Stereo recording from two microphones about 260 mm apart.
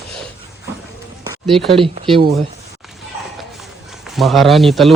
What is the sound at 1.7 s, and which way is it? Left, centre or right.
Speech, centre.